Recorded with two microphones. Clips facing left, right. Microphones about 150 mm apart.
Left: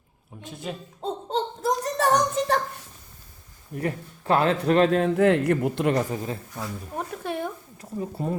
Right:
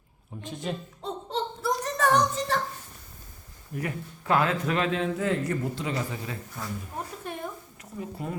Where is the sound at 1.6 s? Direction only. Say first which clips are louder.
Left 2 dB; 40° left (ahead or behind).